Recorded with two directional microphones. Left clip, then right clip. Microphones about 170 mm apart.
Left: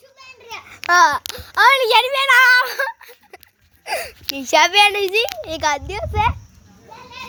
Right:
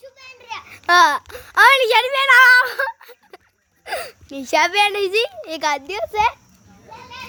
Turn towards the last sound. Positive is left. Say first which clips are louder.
# right 1 dB
turn(degrees=-25)  # may be behind; listen again after turning